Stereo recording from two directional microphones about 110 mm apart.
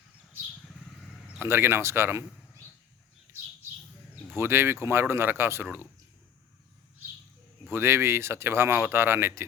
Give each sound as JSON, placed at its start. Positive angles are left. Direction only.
{"t": 1.4, "sound": "speech", "side_deg": -20}
{"t": 4.4, "sound": "speech", "side_deg": -20}
{"t": 7.7, "sound": "speech", "side_deg": -20}